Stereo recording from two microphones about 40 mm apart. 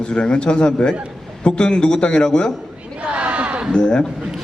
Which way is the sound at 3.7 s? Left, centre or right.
Left.